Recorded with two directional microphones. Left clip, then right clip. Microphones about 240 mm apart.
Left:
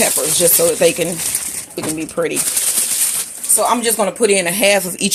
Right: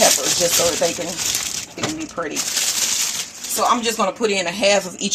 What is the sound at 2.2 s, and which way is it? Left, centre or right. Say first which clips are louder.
Speech: left 8 dB; left.